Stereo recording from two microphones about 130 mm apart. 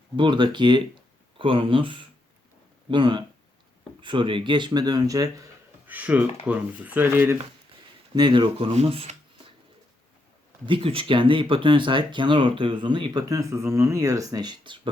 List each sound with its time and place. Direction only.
0.2 s speech: 35° right (ahead or behind)
5.9 s speech: 10° right (ahead or behind)
8.1 s speech: 35° right (ahead or behind)
8.7 s speech: 50° right (ahead or behind)
10.7 s speech: 40° right (ahead or behind)